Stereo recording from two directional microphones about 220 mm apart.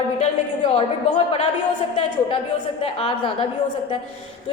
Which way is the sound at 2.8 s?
25° left (ahead or behind).